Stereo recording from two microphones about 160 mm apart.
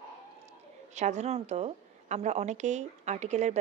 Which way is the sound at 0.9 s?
45° right (ahead or behind).